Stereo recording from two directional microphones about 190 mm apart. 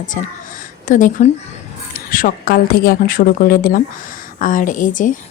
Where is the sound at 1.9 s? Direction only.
45° left (ahead or behind).